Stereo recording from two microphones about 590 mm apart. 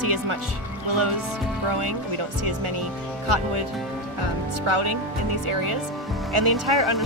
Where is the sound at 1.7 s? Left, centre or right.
Right.